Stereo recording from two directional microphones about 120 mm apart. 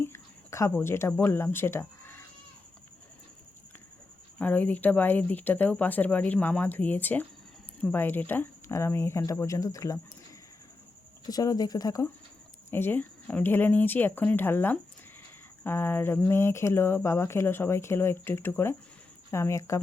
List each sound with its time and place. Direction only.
0.0 s a sound: 25° left (ahead or behind)
0.8 s speech: 20° left (ahead or behind)
4.4 s speech: 15° left (ahead or behind); by 10.0 s 30° left (ahead or behind)
11.3 s speech: 30° left (ahead or behind)
12.7 s speech: 15° left (ahead or behind)